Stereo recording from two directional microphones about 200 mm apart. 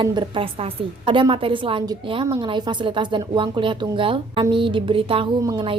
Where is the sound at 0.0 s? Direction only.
20° right (ahead or behind).